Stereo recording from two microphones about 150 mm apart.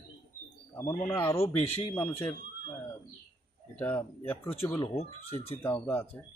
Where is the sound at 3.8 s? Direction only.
15° left (ahead or behind).